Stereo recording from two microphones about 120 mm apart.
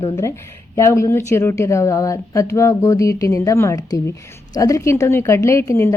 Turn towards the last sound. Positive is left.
turn(degrees=20)  # may be behind; listen again after turning